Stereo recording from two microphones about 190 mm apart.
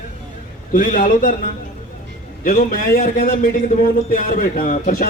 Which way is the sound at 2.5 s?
50° left (ahead or behind).